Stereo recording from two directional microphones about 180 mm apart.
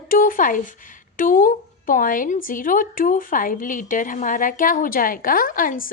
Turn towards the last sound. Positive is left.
turn(degrees=50)  # may be behind; listen again after turning